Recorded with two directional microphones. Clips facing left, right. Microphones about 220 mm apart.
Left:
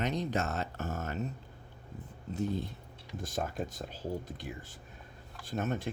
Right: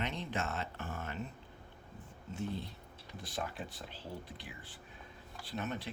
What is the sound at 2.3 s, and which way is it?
Speech, 40° left (ahead or behind).